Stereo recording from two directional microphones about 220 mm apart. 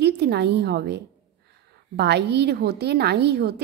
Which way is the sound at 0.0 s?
50° right (ahead or behind).